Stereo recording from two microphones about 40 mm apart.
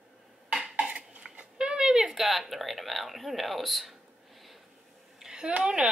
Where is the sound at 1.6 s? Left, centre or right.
Right.